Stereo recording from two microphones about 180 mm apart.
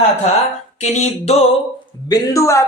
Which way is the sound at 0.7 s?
40° left (ahead or behind).